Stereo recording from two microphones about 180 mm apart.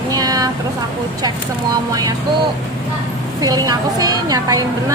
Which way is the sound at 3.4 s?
20° right (ahead or behind).